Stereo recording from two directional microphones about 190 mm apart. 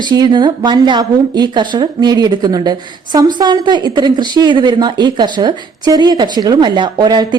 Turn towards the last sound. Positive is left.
turn(degrees=-20)  # may be behind; listen again after turning